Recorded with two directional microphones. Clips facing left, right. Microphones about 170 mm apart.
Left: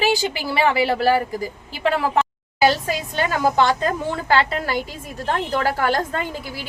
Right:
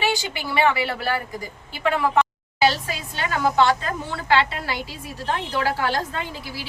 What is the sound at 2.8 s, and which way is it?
Vehicle, 40° left (ahead or behind).